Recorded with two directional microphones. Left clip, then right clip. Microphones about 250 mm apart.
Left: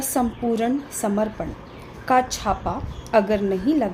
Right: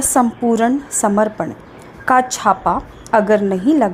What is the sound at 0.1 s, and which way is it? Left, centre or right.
A woman's voice, right.